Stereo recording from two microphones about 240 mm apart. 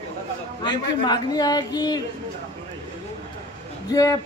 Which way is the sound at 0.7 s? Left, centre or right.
Centre.